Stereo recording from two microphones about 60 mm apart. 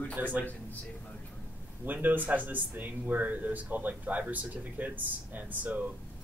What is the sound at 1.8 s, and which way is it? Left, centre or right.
Speech, right.